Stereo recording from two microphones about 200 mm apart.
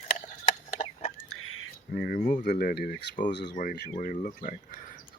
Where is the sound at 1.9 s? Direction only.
45° left (ahead or behind).